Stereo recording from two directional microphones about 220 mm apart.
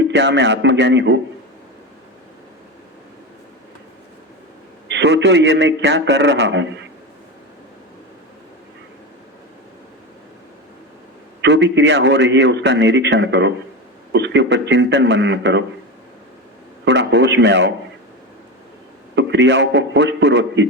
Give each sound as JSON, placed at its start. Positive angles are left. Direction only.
{"t": 0.0, "sound": "a man's voice", "side_deg": -50}
{"t": 4.9, "sound": "a man's voice", "side_deg": -50}
{"t": 11.3, "sound": "a man's voice", "side_deg": -55}
{"t": 16.8, "sound": "a man's voice", "side_deg": -55}
{"t": 19.1, "sound": "a man's voice", "side_deg": -55}